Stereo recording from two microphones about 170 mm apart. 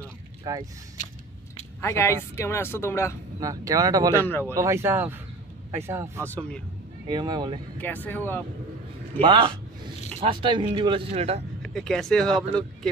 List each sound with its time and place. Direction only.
0.0 s vehicle: 20° right (ahead or behind)
1.8 s speech: 15° left (ahead or behind)
3.3 s speech: 20° right (ahead or behind)
4.1 s speech: 15° left (ahead or behind)
4.6 s speech: 15° right (ahead or behind)
6.3 s speech: 5° left (ahead or behind)
7.1 s speech: 25° right (ahead or behind)
7.8 s speech: 10° left (ahead or behind)
9.2 s speech: 30° right (ahead or behind)
11.6 s speech: 5° left (ahead or behind)